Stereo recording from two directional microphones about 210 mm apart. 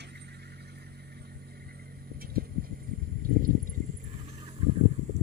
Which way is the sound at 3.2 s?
45° right (ahead or behind).